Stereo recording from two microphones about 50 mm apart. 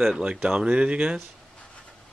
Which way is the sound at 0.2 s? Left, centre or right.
Right.